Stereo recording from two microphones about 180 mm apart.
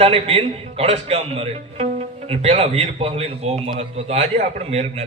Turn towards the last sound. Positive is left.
turn(degrees=-35)  # may be behind; listen again after turning